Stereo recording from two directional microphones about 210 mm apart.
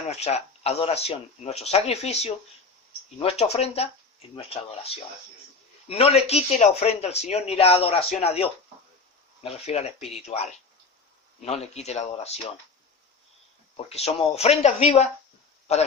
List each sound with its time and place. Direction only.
0.1 s speech: 30° left (ahead or behind)
13.7 s speech: 30° left (ahead or behind)